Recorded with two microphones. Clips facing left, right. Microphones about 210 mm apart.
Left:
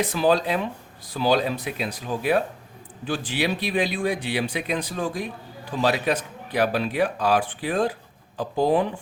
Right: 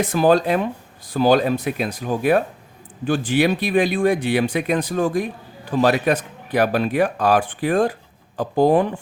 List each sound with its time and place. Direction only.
0.0 s speech: 50° right (ahead or behind)